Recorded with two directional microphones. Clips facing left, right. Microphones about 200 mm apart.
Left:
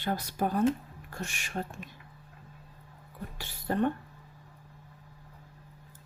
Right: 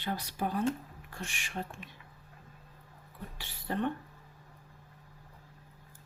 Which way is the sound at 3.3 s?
45° left (ahead or behind).